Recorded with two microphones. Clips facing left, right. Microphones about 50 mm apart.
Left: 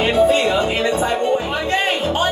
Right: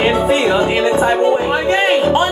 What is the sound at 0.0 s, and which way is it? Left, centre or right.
Music, right.